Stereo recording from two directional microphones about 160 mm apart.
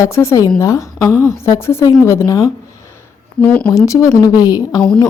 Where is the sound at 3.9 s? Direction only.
20° left (ahead or behind).